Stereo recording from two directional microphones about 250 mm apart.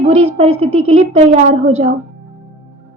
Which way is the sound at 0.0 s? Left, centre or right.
Right.